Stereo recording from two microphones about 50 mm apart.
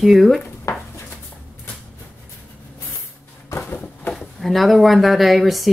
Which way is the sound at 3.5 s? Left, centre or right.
Left.